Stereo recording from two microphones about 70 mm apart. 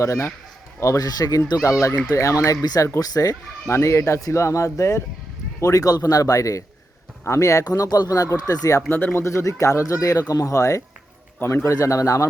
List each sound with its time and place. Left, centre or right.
0.0 s speech: left
2.1 s speech: left
3.7 s speech: left
7.6 s speech: left
8.9 s speech: left
9.2 s speech: left
11.3 s a man's voice: left
11.6 s speech: left